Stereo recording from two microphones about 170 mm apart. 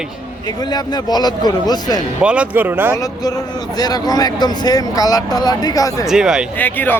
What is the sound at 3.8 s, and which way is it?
Speech, 25° left (ahead or behind).